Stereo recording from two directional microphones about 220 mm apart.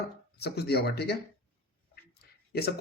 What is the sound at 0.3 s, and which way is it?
Speech, 45° left (ahead or behind).